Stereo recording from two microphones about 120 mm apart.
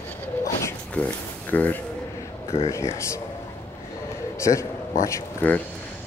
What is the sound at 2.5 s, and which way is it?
Speech, 60° left (ahead or behind).